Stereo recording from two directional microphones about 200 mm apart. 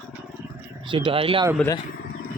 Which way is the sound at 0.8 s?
25° right (ahead or behind).